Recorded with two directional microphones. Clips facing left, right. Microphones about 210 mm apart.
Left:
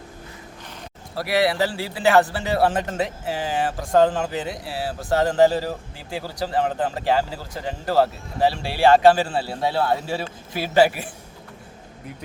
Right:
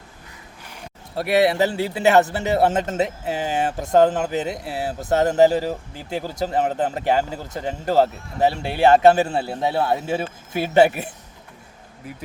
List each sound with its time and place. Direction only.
1.1 s a man's voice: 25° right (ahead or behind)